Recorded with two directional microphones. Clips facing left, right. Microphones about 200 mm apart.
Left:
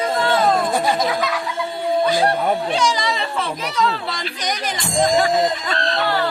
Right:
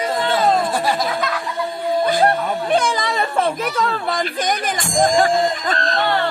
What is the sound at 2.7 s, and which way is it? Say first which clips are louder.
Speech: right 2 dB; 55° right (ahead or behind).